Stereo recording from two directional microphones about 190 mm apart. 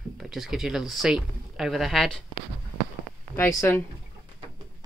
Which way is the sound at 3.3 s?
10° left (ahead or behind).